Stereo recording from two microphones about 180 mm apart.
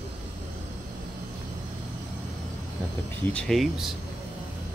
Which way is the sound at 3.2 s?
5° left (ahead or behind).